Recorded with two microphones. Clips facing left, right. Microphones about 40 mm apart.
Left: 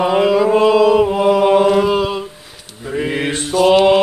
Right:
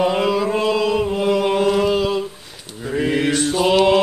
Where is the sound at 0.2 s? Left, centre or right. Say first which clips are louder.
Left 6 dB; centre.